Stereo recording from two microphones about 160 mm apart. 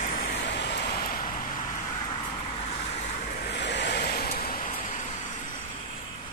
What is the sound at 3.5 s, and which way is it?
Vehicle, 90° left.